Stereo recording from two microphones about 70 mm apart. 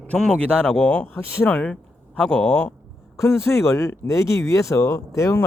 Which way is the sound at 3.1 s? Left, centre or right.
Left.